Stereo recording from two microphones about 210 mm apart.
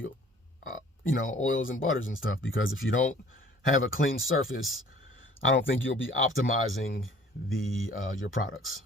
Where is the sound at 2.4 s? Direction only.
65° left (ahead or behind).